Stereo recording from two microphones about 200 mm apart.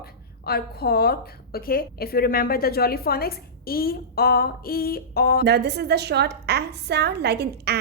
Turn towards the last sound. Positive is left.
turn(degrees=-55)  # may be behind; listen again after turning